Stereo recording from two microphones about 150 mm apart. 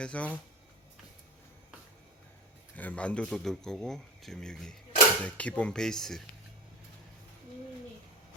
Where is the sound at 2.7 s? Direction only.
10° left (ahead or behind).